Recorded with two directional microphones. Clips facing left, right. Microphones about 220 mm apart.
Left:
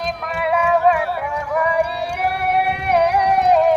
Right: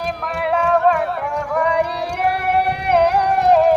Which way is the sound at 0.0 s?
Centre (ahead or behind).